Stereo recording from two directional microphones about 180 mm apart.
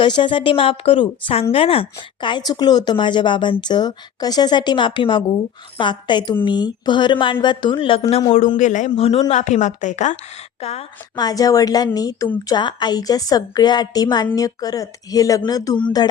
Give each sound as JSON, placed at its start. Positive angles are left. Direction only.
{"t": 0.0, "sound": "a woman's voice", "side_deg": 25}
{"t": 8.5, "sound": "speech", "side_deg": 45}
{"t": 11.1, "sound": "a woman's voice", "side_deg": 20}